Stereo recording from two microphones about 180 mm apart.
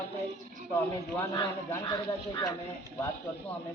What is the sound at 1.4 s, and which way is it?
Speech, 25° left (ahead or behind).